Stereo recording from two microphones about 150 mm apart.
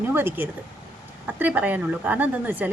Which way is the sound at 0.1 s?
15° right (ahead or behind).